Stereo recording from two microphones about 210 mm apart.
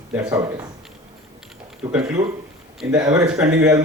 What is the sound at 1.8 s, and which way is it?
Speech, 10° right (ahead or behind).